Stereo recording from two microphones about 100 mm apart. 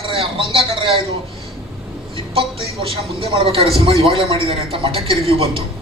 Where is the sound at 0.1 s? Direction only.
70° right (ahead or behind).